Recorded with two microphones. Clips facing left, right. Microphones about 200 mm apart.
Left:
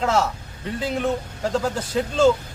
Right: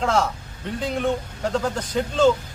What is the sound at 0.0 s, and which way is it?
A man's voice, 5° left (ahead or behind).